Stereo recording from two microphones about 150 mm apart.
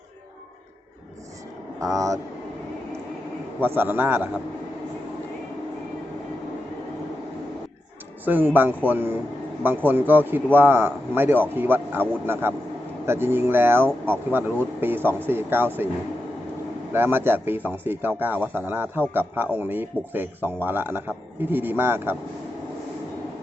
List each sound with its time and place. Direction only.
1.8 s speech: 20° right (ahead or behind)
3.6 s speech: 15° right (ahead or behind)
8.2 s speech: 10° right (ahead or behind)
16.9 s speech: 15° right (ahead or behind)